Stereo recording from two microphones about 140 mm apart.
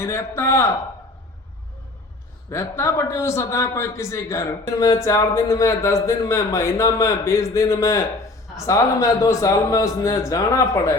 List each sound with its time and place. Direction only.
0.0 s a man's voice: 20° left (ahead or behind)
2.5 s a man's voice: 20° left (ahead or behind)